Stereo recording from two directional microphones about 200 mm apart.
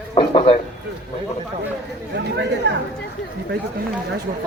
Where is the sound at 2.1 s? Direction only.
60° right (ahead or behind).